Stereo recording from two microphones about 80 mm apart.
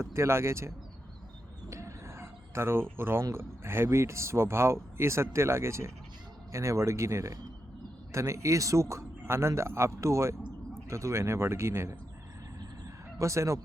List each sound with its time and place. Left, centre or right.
0.0 s speech: right
1.7 s a sound: right
3.0 s speech: right
13.1 s speech: right